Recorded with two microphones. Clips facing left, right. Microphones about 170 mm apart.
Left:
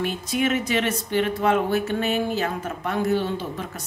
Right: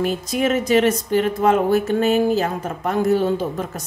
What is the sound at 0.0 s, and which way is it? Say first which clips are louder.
Speech: right 4 dB; 40° right (ahead or behind).